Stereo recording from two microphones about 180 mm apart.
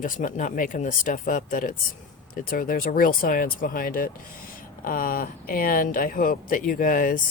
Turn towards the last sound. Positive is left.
turn(degrees=50)  # may be behind; listen again after turning